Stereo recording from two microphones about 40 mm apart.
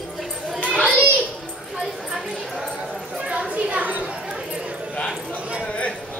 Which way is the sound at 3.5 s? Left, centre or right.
Right.